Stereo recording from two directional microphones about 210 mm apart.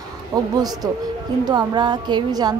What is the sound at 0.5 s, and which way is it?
A woman's voice, 20° right (ahead or behind).